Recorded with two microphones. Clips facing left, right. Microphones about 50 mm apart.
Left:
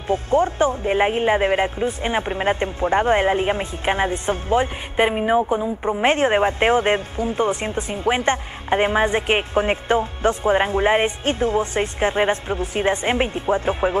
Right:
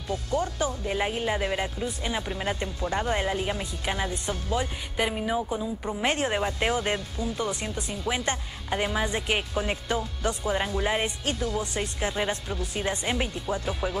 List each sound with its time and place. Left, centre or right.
0.1 s speech: left